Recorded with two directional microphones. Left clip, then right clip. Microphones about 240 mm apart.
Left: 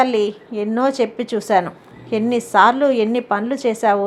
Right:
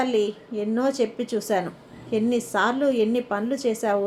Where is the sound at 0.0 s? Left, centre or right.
Left.